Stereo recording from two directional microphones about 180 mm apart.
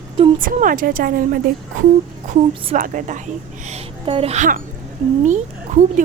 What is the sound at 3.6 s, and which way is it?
A woman's voice, 35° right (ahead or behind).